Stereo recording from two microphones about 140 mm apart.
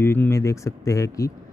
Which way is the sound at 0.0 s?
20° left (ahead or behind).